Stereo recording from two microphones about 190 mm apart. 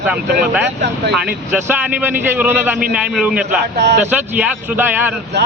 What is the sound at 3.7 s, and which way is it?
Speech, 65° right (ahead or behind).